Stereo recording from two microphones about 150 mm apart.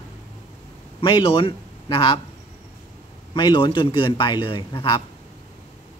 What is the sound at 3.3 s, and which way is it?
A man's voice, 30° left (ahead or behind).